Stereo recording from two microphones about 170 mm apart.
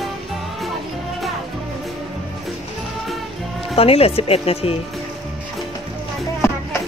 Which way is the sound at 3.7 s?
35° left (ahead or behind).